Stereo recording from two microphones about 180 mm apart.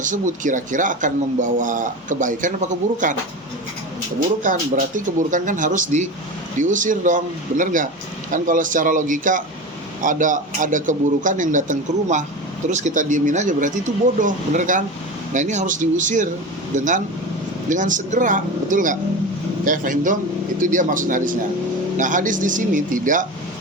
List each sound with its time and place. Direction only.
0.0 s speech: 45° right (ahead or behind)
4.9 s speech: 45° right (ahead or behind)